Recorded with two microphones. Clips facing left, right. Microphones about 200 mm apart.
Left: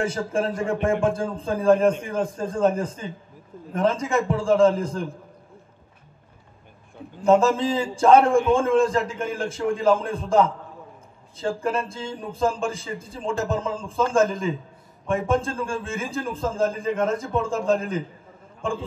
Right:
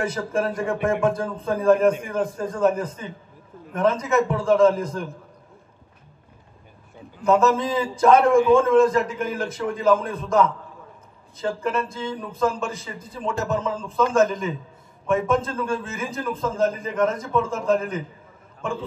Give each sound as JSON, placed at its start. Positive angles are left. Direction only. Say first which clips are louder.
{"t": 0.0, "sound": "a man's voice", "louder": "even", "side_deg": 30}
{"t": 7.2, "sound": "a man's voice", "louder": "left 1 dB", "side_deg": 30}